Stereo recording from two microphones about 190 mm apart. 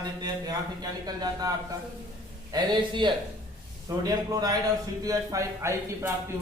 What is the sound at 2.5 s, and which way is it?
A man's voice, 25° right (ahead or behind).